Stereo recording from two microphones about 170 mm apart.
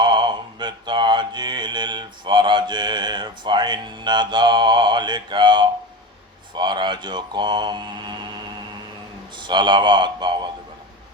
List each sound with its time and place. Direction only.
0.0 s mantra: 25° right (ahead or behind)
9.4 s speech: 25° right (ahead or behind)